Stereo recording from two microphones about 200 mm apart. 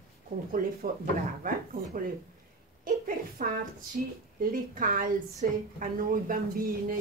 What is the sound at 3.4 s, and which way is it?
A woman's voice, 40° right (ahead or behind).